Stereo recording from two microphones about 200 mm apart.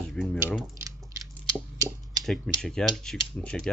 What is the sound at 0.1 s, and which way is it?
Typing, 5° left (ahead or behind).